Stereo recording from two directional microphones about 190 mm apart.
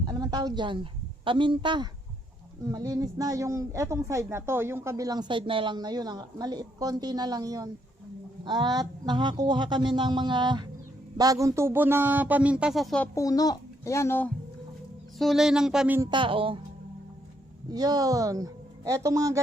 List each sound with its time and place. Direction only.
0.1 s a woman's voice: 20° right (ahead or behind); by 13.1 s centre (ahead or behind)
13.1 s a child's voice: 20° left (ahead or behind)
15.2 s speech: centre (ahead or behind)
16.0 s speech: 25° right (ahead or behind)
17.7 s speech: 20° right (ahead or behind)